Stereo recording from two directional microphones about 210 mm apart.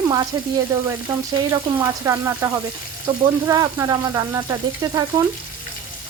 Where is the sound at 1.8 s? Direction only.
15° right (ahead or behind).